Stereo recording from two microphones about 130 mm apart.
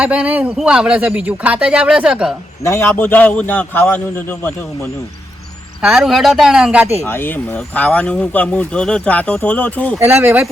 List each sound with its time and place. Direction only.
0.0 s speech: 10° right (ahead or behind)
2.6 s speech: 20° left (ahead or behind)
5.8 s speech: 5° right (ahead or behind)
7.0 s speech: 15° left (ahead or behind)
10.0 s speech: 15° right (ahead or behind)